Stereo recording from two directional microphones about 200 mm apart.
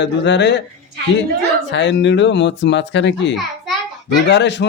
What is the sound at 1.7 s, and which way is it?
A man's voice, 60° left (ahead or behind).